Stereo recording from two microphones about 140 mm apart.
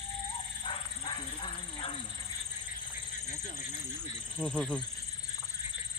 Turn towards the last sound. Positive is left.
turn(degrees=5)  # may be behind; listen again after turning